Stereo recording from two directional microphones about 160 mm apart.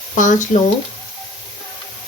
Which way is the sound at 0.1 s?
50° left (ahead or behind).